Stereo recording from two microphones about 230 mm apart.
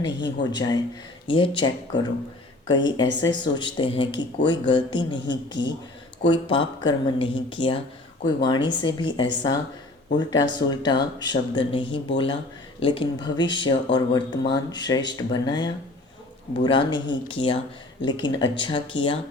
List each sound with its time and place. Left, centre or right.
0.0 s speech: centre
6.2 s speech: left